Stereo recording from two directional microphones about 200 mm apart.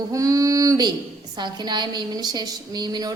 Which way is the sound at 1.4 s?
20° right (ahead or behind).